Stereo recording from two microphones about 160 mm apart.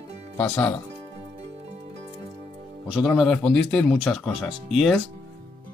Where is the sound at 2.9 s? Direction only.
5° right (ahead or behind).